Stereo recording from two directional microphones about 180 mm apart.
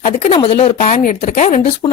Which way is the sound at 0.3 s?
30° left (ahead or behind).